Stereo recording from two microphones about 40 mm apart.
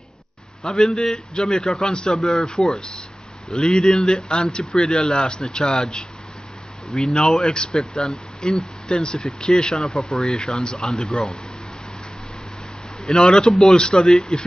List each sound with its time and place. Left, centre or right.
0.8 s speech: centre
1.1 s speech: centre
2.1 s speech: centre
2.4 s speech: left
13.0 s speech: centre